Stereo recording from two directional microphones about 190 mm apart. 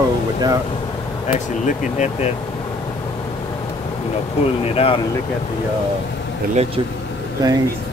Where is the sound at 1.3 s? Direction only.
40° left (ahead or behind).